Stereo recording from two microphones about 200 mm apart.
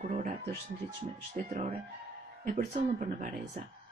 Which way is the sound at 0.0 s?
40° right (ahead or behind).